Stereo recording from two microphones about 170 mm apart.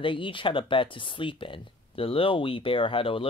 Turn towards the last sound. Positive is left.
turn(degrees=30)  # may be behind; listen again after turning